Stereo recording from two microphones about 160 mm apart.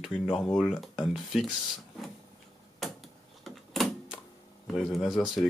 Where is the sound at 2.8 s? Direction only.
Centre (ahead or behind).